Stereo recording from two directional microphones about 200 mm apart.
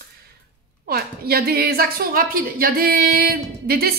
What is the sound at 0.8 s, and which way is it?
A woman's voice, 50° right (ahead or behind).